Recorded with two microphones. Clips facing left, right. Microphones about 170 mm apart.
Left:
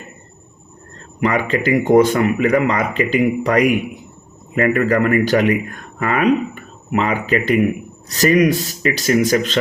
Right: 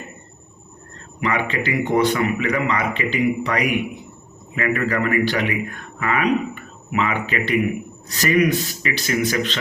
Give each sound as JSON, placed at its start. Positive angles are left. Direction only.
{"t": 1.2, "sound": "speech", "side_deg": 40}